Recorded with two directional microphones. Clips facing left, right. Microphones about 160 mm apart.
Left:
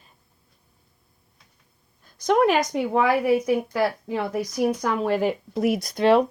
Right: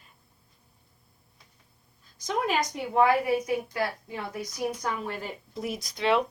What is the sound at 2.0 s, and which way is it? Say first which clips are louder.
A woman's voice: left 10 dB; 65° left (ahead or behind).